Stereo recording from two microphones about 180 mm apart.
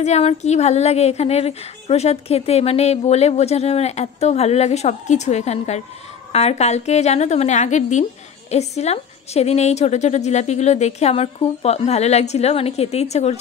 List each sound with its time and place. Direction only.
0.0 s a woman's voice: 35° left (ahead or behind)